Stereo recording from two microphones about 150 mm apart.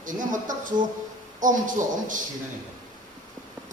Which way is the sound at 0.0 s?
60° right (ahead or behind).